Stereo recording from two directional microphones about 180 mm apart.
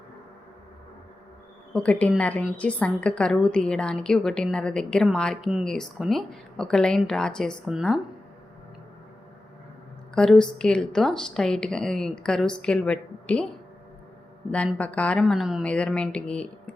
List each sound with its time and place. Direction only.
1.7 s a woman's voice: 5° left (ahead or behind)
10.2 s a woman's voice: 5° left (ahead or behind)
14.5 s a woman's voice: 5° left (ahead or behind)